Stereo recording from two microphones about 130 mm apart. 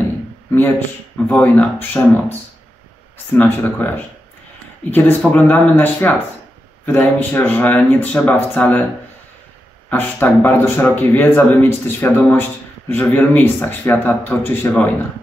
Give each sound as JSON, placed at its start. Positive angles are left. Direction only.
{"t": 0.5, "sound": "speech", "side_deg": 15}
{"t": 3.3, "sound": "speech", "side_deg": 15}
{"t": 5.3, "sound": "speech", "side_deg": 15}
{"t": 9.8, "sound": "speech", "side_deg": 15}